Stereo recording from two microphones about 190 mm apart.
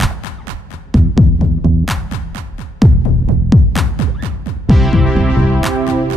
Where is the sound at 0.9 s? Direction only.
Centre (ahead or behind).